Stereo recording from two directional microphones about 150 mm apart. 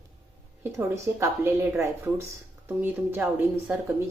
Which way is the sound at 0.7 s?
20° right (ahead or behind).